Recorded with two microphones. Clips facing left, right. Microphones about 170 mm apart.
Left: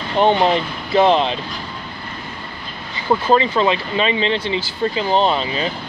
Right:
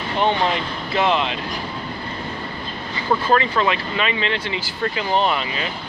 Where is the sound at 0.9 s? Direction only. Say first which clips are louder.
Left 6 dB; 30° left (ahead or behind).